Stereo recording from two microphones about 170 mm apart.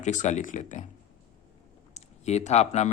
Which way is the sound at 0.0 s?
45° left (ahead or behind).